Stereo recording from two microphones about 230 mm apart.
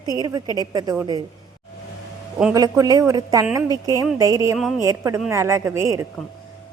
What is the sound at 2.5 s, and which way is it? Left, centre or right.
A woman's voice, centre.